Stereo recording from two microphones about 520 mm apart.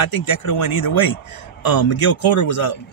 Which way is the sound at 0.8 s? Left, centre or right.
Left.